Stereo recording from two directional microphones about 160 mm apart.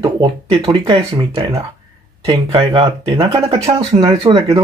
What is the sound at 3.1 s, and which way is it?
Speech, 20° right (ahead or behind).